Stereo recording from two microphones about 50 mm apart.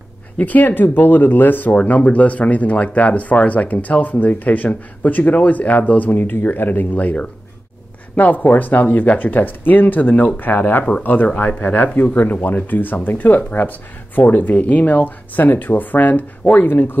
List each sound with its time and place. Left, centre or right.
0.4 s speech: left